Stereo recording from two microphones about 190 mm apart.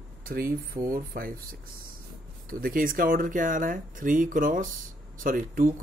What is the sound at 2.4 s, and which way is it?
Speech, 45° right (ahead or behind).